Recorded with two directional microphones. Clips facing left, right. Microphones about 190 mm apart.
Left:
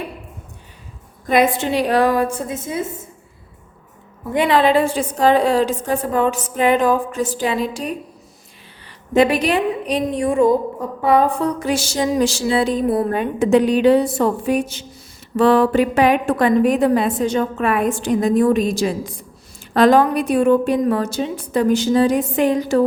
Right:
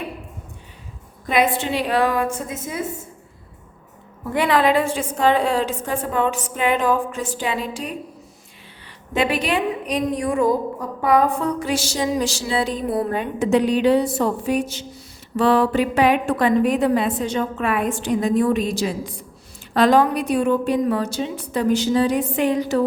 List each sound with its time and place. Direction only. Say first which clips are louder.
1.3 s a woman's voice: left 3 dB; 40° left (ahead or behind)
4.4 s a woman's voice: left 3 dB; 25° left (ahead or behind)
9.1 s a woman's voice: left 5 dB; 40° left (ahead or behind)